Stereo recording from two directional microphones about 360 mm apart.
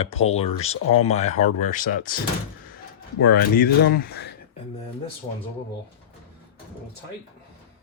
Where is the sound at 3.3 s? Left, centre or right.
Left.